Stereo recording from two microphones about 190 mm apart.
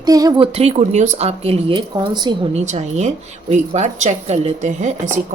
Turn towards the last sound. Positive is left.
turn(degrees=-40)  # may be behind; listen again after turning